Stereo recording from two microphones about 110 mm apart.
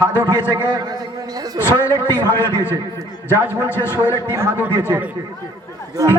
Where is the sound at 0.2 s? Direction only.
35° right (ahead or behind).